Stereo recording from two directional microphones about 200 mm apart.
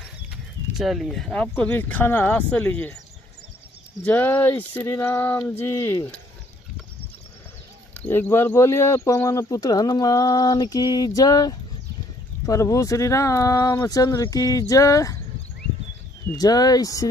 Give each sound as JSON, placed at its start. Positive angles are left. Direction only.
{"t": 0.7, "sound": "speech", "side_deg": 0}
{"t": 4.0, "sound": "speech", "side_deg": 10}
{"t": 7.9, "sound": "speech", "side_deg": 10}
{"t": 16.3, "sound": "speech", "side_deg": 20}